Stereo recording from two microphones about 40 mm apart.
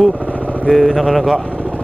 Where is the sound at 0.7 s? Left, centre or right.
Centre.